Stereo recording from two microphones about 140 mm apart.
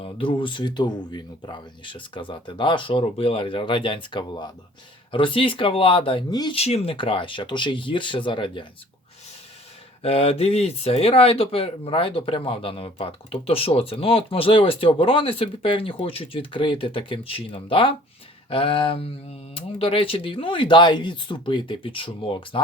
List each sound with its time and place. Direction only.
0.0 s speech: 40° left (ahead or behind)
6.6 s speech: 50° left (ahead or behind)
10.0 s speech: 45° left (ahead or behind)